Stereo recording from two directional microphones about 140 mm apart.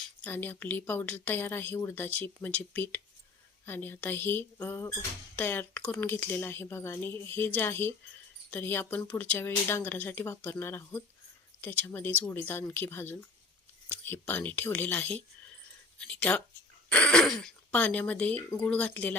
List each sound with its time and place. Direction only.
0.3 s speech: 15° left (ahead or behind)